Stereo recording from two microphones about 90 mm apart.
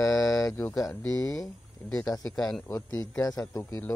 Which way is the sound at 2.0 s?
45° left (ahead or behind).